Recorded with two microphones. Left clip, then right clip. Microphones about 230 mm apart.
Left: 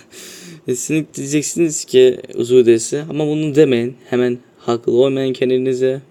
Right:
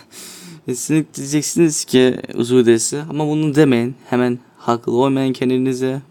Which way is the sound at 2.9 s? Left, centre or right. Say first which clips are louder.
Left 2 dB; centre.